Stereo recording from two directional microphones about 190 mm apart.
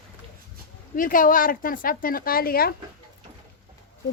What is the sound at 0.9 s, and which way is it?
A woman's voice, 45° left (ahead or behind).